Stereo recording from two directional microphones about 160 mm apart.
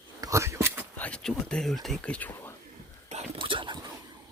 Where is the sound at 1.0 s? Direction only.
5° left (ahead or behind).